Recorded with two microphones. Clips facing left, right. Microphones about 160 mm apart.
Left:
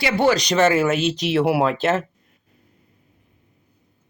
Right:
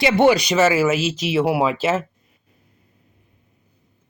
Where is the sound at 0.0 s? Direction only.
20° right (ahead or behind).